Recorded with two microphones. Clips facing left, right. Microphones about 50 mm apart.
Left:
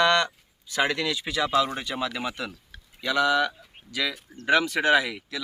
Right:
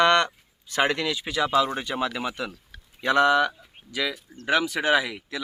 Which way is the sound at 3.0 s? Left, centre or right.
Right.